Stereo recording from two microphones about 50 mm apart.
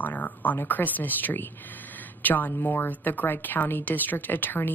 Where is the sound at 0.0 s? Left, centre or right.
Left.